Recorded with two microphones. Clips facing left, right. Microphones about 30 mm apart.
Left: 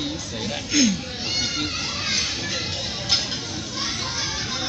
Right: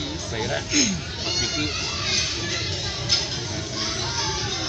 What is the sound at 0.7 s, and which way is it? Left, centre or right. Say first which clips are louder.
Speech: left 7 dB; left.